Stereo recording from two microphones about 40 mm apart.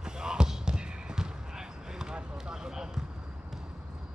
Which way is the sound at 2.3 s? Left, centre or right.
Centre.